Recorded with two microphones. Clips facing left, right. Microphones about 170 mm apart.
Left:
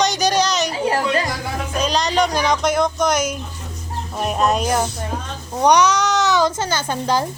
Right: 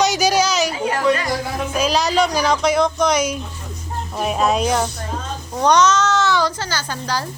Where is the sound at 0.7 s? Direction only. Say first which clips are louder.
Right 1 dB; 30° left (ahead or behind).